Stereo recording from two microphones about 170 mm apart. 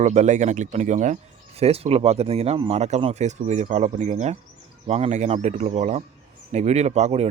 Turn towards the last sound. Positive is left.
turn(degrees=-40)  # may be behind; listen again after turning